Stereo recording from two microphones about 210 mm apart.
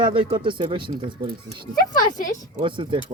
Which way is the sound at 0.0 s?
25° right (ahead or behind).